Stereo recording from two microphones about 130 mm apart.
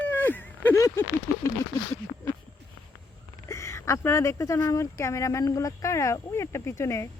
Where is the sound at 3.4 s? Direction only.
20° left (ahead or behind).